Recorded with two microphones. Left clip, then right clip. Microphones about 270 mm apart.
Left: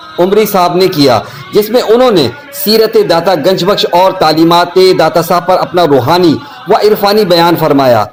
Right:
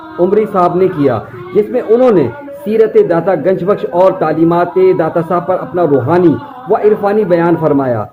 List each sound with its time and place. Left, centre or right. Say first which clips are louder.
0.3 s a man's voice: left 3 dB; centre